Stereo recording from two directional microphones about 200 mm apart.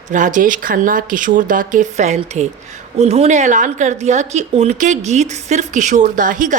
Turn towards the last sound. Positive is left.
turn(degrees=-40)  # may be behind; listen again after turning